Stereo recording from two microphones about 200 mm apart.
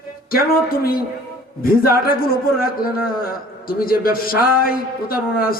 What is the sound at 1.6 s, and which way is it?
Speech, 45° left (ahead or behind).